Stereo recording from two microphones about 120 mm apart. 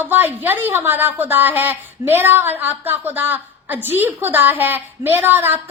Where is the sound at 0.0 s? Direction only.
15° right (ahead or behind).